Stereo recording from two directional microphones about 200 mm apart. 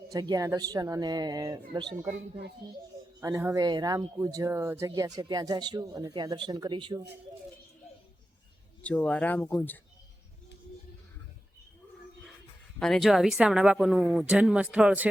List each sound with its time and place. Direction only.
0.1 s speech: 20° right (ahead or behind)
3.2 s speech: 15° right (ahead or behind)
8.8 s speech: 5° left (ahead or behind)
12.8 s speech: centre (ahead or behind)